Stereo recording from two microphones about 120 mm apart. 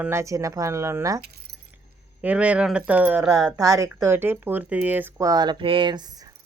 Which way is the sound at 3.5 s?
30° right (ahead or behind).